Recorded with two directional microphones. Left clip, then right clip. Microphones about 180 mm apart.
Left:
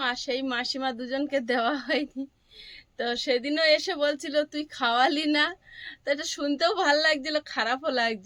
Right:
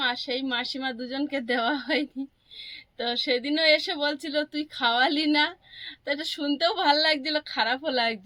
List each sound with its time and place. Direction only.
0.0 s a woman's voice: 40° left (ahead or behind)